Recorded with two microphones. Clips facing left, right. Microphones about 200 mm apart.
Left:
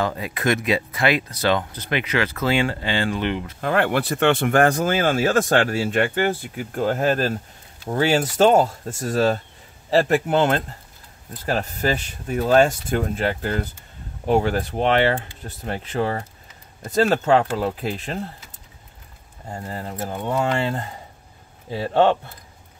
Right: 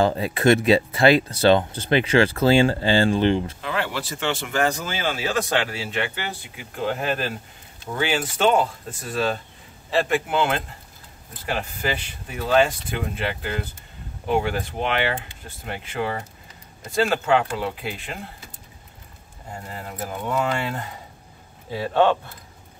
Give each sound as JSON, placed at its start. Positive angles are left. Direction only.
{"t": 0.0, "sound": "speech", "side_deg": -30}
{"t": 3.6, "sound": "speech", "side_deg": 55}
{"t": 19.7, "sound": "speech", "side_deg": 30}